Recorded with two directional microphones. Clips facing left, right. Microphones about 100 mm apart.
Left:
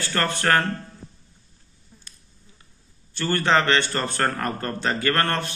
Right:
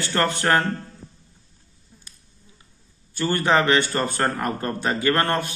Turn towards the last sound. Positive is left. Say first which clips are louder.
# right 2 dB
turn(degrees=-15)  # may be behind; listen again after turning